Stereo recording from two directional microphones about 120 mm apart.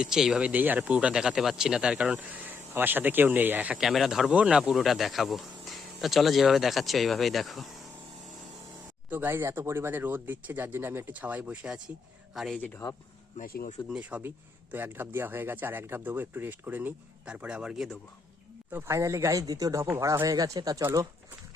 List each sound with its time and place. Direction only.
0.0 s speech: 5° right (ahead or behind)
9.0 s speech: 15° right (ahead or behind); by 12.5 s centre (ahead or behind)
12.5 s speech: 15° left (ahead or behind)
13.9 s speech: 10° right (ahead or behind)
18.7 s speech: 20° right (ahead or behind)